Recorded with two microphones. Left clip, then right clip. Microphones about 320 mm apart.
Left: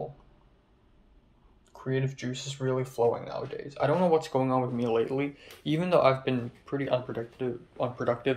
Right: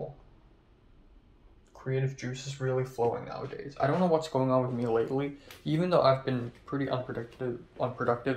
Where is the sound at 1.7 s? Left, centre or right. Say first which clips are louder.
Left 2 dB; centre.